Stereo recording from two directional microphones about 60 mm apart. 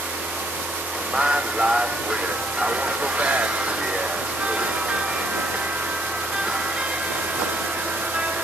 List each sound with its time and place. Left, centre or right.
1.1 s speech: centre
3.2 s speech: centre